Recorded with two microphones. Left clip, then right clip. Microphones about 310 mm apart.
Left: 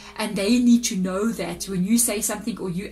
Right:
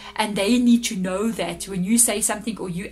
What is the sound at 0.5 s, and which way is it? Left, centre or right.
Speech, right.